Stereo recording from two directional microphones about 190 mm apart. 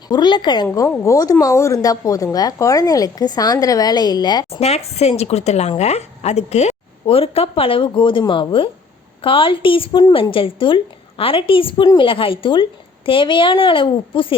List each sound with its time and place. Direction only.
0.1 s a woman's voice: 25° left (ahead or behind)
4.4 s a woman's voice: 35° left (ahead or behind)